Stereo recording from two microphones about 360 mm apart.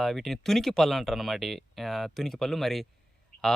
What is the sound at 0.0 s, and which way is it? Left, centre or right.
Speech, centre.